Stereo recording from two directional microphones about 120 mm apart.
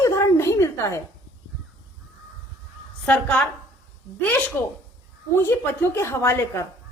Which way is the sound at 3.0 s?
10° left (ahead or behind).